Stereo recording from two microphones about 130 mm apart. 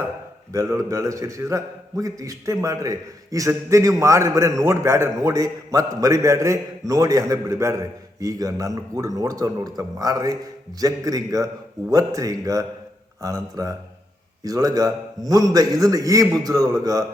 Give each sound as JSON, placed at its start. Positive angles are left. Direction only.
{"t": 0.5, "sound": "a man's voice", "side_deg": -25}